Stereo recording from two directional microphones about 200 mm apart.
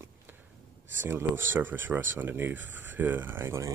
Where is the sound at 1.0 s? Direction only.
10° right (ahead or behind).